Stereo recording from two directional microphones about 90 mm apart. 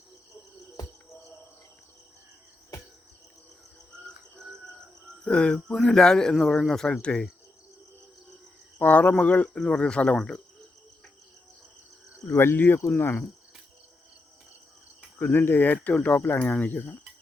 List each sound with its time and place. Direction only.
5.2 s speech: 10° left (ahead or behind)
8.8 s speech: 15° left (ahead or behind)
12.3 s speech: 25° left (ahead or behind)
15.2 s speech: 20° left (ahead or behind)